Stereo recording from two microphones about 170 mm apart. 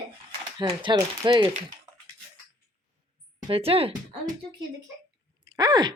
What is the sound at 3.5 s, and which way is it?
Speech, 35° right (ahead or behind).